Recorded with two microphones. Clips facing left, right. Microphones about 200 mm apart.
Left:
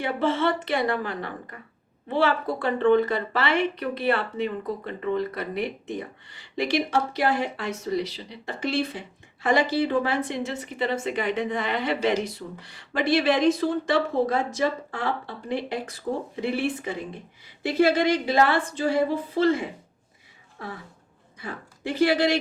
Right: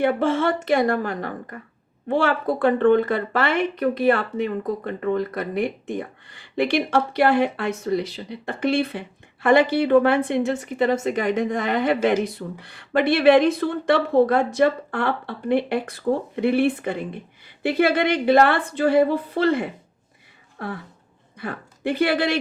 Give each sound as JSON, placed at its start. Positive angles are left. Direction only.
{"t": 0.0, "sound": "a woman's voice", "side_deg": -50}